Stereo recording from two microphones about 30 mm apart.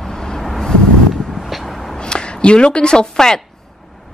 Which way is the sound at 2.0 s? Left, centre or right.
Left.